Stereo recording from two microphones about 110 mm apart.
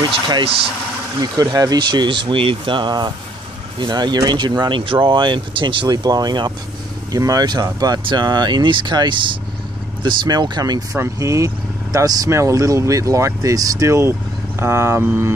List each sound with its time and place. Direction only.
1.2 s speech: 35° right (ahead or behind); by 15.3 s 20° right (ahead or behind)